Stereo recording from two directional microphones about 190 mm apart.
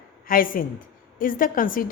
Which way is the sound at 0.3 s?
50° left (ahead or behind).